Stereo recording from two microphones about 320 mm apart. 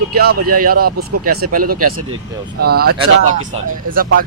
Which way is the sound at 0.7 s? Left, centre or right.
Right.